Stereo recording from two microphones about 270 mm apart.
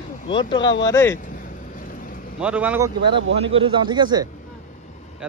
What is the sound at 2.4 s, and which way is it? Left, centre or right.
Speech, centre.